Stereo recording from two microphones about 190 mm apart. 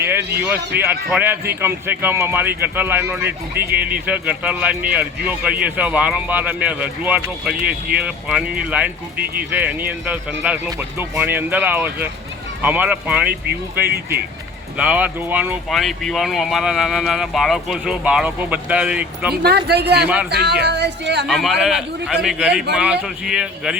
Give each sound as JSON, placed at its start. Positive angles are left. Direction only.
{"t": 0.0, "sound": "speech", "side_deg": -10}
{"t": 19.4, "sound": "speech", "side_deg": -60}
{"t": 21.2, "sound": "speech", "side_deg": 0}